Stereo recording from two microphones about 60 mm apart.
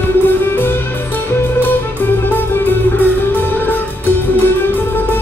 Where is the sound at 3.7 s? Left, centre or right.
Left.